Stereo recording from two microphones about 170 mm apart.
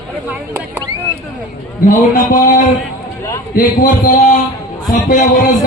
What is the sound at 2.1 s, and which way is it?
A man's voice, 50° left (ahead or behind).